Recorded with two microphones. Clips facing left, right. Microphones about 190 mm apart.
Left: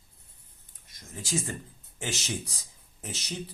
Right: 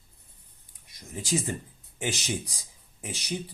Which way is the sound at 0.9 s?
15° right (ahead or behind).